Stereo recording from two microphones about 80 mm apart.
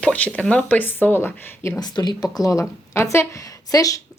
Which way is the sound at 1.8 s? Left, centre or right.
Left.